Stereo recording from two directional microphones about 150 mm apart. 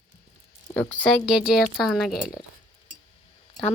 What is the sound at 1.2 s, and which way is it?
Speech, 5° right (ahead or behind).